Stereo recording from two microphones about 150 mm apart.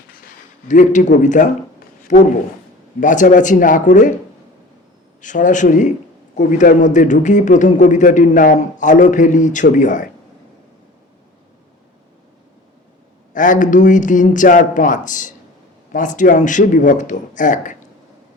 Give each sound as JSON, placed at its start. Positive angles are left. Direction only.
{"t": 0.7, "sound": "speech", "side_deg": 55}
{"t": 5.2, "sound": "speech", "side_deg": 55}
{"t": 13.3, "sound": "speech", "side_deg": 60}